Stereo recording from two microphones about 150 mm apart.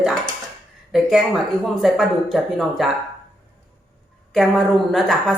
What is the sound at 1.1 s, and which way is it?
A woman's voice, centre (ahead or behind).